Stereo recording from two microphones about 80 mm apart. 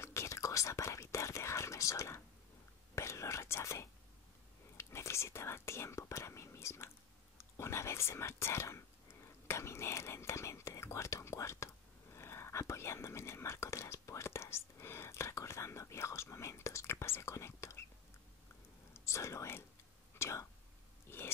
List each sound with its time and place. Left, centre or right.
0.0 s whispering: left
18.9 s whispering: left
21.1 s pig: left